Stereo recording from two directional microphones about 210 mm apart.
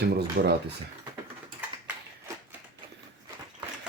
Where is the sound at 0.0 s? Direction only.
50° right (ahead or behind).